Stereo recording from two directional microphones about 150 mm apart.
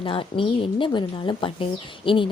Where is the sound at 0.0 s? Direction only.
35° left (ahead or behind).